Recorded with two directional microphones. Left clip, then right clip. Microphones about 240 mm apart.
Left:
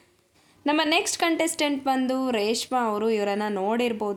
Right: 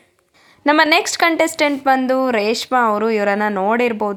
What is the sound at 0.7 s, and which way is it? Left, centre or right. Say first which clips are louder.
Speech: right 9 dB; centre.